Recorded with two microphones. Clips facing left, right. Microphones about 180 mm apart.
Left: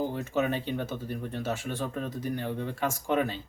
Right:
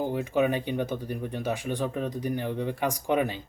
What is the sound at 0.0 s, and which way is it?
Speech, 15° right (ahead or behind).